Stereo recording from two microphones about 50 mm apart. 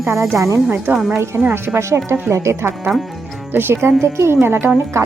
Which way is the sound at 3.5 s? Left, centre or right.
Right.